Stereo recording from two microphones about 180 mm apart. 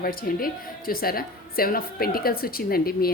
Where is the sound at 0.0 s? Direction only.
55° left (ahead or behind).